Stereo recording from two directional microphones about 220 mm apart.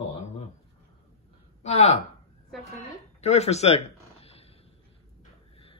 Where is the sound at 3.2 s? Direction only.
30° left (ahead or behind).